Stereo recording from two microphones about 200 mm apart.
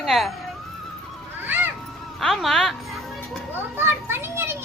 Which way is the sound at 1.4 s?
10° right (ahead or behind).